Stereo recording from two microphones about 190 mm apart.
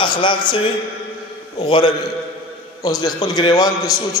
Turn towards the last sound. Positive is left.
turn(degrees=20)  # may be behind; listen again after turning